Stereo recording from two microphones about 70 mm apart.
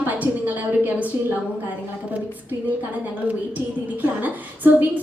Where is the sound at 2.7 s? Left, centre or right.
Right.